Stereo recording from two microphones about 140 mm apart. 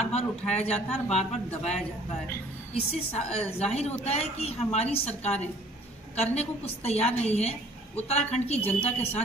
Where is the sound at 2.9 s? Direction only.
45° left (ahead or behind).